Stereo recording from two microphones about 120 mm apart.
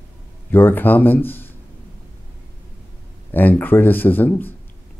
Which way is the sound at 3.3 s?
15° left (ahead or behind).